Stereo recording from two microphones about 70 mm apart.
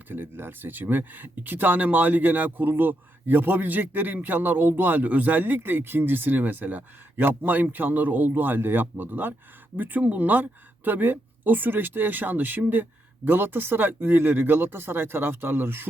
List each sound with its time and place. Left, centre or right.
0.1 s speech: right